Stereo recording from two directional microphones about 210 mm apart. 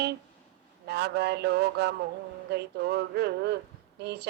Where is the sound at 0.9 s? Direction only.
50° right (ahead or behind).